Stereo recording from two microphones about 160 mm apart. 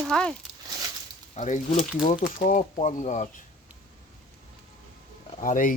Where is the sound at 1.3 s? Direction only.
50° left (ahead or behind).